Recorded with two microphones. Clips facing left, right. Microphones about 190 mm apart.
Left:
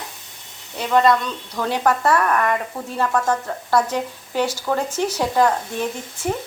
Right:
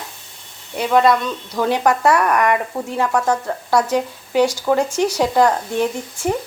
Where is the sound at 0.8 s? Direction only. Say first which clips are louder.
Right 2 dB; 10° right (ahead or behind).